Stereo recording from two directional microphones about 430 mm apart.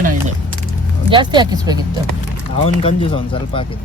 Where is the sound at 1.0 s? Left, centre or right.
Centre.